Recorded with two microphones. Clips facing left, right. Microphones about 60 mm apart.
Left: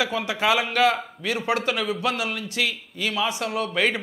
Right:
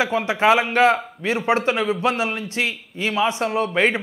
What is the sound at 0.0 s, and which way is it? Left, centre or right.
A man's voice, right.